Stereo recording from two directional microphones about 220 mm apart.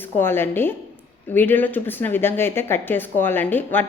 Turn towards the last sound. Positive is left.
turn(degrees=10)  # may be behind; listen again after turning